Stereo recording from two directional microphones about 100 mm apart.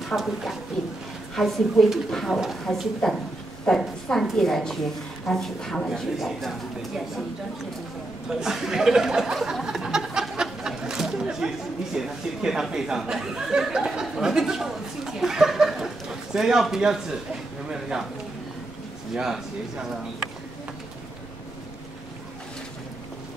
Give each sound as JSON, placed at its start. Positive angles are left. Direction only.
{"t": 0.1, "sound": "speech", "side_deg": 0}
{"t": 8.3, "sound": "speech", "side_deg": -5}
{"t": 19.1, "sound": "speech", "side_deg": -5}